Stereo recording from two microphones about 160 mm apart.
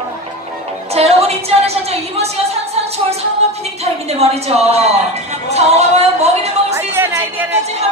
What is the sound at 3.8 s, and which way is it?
A woman's voice, 40° right (ahead or behind).